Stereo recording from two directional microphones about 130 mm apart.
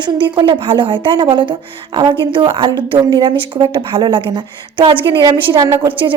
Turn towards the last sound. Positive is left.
turn(degrees=-40)  # may be behind; listen again after turning